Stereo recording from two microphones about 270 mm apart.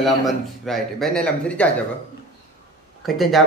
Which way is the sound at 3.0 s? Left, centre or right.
Centre.